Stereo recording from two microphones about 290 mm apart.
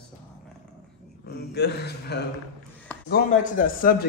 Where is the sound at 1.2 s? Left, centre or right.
Left.